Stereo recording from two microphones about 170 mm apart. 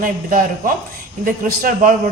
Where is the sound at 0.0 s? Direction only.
60° right (ahead or behind).